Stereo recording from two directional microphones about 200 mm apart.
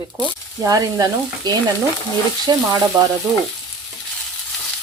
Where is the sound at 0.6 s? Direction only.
20° right (ahead or behind).